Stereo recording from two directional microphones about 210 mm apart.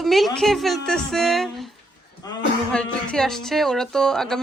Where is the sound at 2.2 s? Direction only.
15° left (ahead or behind).